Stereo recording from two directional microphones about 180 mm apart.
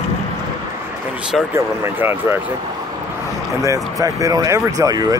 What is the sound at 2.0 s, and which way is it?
Speech, 10° right (ahead or behind).